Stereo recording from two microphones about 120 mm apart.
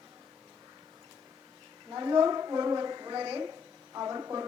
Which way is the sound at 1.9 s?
35° right (ahead or behind).